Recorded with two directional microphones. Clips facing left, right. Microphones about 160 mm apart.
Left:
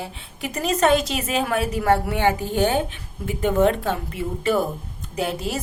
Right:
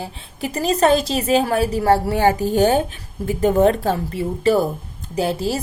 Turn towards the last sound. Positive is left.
turn(degrees=-35)  # may be behind; listen again after turning